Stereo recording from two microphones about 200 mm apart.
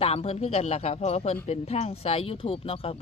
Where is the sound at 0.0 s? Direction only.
30° left (ahead or behind).